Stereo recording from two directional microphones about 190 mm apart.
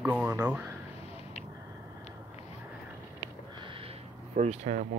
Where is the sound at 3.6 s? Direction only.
30° right (ahead or behind).